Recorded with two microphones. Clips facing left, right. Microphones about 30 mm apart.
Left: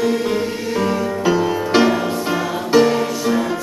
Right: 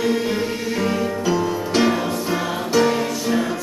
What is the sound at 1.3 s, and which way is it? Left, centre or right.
Music, centre.